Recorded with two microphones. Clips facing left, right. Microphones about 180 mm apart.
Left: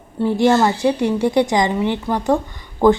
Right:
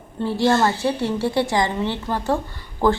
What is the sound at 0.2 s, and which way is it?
A woman's voice, 15° left (ahead or behind).